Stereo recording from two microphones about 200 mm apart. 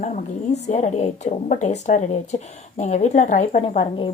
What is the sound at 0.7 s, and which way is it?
Speech, 35° left (ahead or behind).